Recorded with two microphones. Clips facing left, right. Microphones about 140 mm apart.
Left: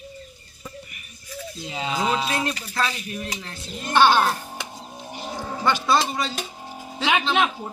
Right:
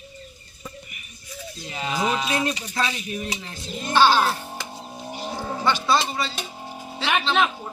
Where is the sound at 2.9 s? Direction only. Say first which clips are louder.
Right 2 dB; 40° left (ahead or behind).